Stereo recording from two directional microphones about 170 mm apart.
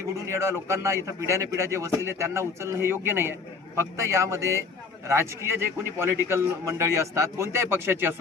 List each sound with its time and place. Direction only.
0.3 s a man's voice: 15° right (ahead or behind)